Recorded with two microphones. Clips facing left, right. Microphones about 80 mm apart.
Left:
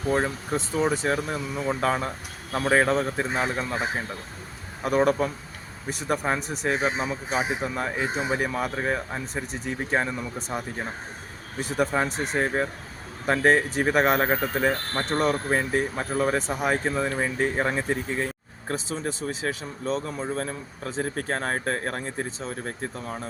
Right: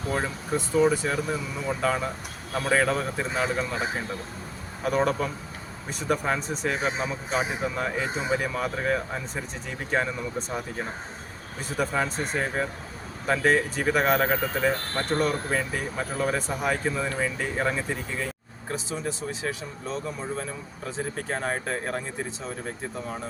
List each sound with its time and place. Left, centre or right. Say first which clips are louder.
0.1 s speech: left 3 dB; left
1.0 s speech: left 1 dB; left
2.5 s speech: left 2 dB; left
4.9 s speech: left 3 dB; centre
13.2 s speech: left 2 dB; left
15.0 s speech: left 2 dB; centre
15.4 s speech: left 4 dB; left
16.5 s speech: left 2 dB; centre
21.2 s speech: left 1 dB; left